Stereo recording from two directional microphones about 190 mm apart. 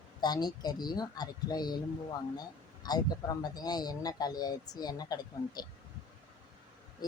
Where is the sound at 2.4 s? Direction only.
20° left (ahead or behind).